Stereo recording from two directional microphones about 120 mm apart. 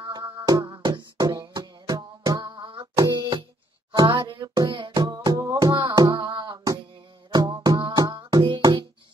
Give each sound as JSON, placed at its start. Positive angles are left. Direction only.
{"t": 0.0, "sound": "music", "side_deg": -40}